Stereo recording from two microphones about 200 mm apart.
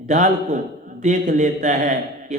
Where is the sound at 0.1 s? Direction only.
35° right (ahead or behind).